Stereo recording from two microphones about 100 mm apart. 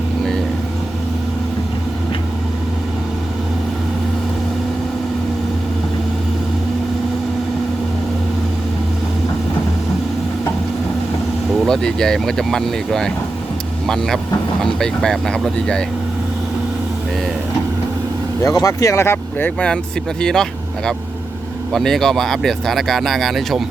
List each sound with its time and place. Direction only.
11.6 s speech: 5° left (ahead or behind)
18.4 s speech: 35° left (ahead or behind); by 23.6 s centre (ahead or behind)